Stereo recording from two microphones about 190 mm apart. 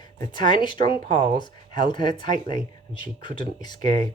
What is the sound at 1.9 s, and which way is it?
Speech, 25° left (ahead or behind).